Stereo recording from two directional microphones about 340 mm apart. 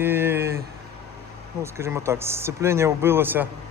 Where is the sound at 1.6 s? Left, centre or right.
Centre.